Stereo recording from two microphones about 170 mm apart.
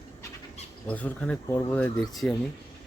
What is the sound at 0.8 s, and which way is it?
Speech, 10° left (ahead or behind).